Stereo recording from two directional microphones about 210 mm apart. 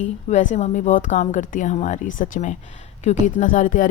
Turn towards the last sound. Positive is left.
turn(degrees=40)  # may be behind; listen again after turning